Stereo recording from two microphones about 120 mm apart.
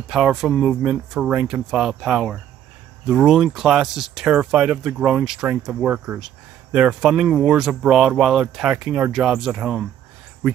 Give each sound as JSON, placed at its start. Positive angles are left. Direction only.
{"t": 0.1, "sound": "speech", "side_deg": -5}